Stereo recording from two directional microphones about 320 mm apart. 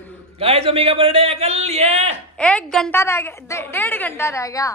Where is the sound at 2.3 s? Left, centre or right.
Centre.